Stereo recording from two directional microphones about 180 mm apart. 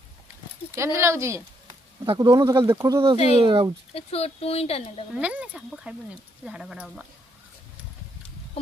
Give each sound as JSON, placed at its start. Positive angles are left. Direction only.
{"t": 0.7, "sound": "speech", "side_deg": -15}
{"t": 3.3, "sound": "speech", "side_deg": -30}
{"t": 3.9, "sound": "speech", "side_deg": 35}
{"t": 5.1, "sound": "speech", "side_deg": -5}